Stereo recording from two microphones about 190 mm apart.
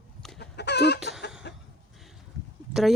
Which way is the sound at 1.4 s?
60° left (ahead or behind).